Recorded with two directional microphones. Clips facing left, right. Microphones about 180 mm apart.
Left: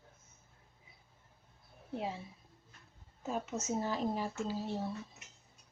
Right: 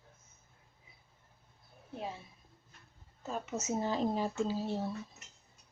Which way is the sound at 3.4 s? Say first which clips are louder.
Right 1 dB; 5° right (ahead or behind).